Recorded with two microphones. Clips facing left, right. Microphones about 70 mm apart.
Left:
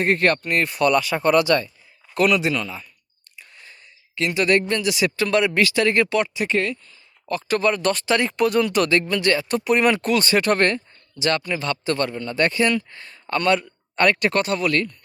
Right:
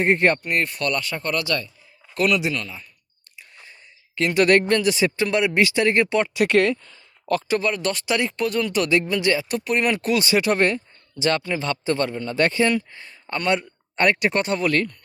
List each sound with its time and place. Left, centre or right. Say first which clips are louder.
0.0 s speech: right 1 dB; right
0.4 s speech: left 4 dB; centre
1.5 s speech: left 6 dB; left
2.1 s speech: left 2 dB; centre
4.1 s speech: right 2 dB; right
4.6 s speech: right 2 dB; right; by 6.1 s centre
6.3 s speech: right 5 dB; right
7.6 s speech: left 4 dB; centre
8.4 s speech: left 4 dB; centre
8.9 s speech: even; centre
9.6 s speech: left 3 dB; centre
11.2 s a man's voice: even; right; by 14.4 s centre
14.4 s speech: even; right